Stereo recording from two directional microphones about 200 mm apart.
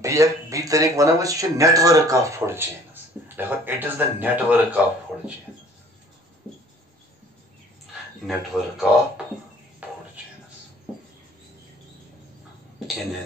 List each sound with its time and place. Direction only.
0.0 s speech: 15° right (ahead or behind)
8.3 s speech: centre (ahead or behind)